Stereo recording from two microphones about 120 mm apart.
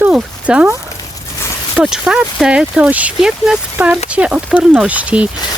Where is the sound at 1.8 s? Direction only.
5° right (ahead or behind).